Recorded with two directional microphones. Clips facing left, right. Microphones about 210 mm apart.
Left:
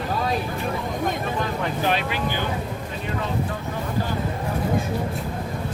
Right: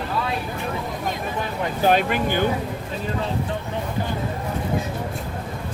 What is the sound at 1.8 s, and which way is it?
Speech, 45° right (ahead or behind).